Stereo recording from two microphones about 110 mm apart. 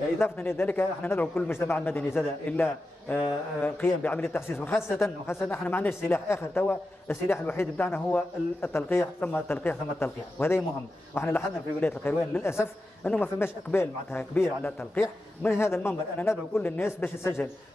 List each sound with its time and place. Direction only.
0.2 s speech: 20° left (ahead or behind)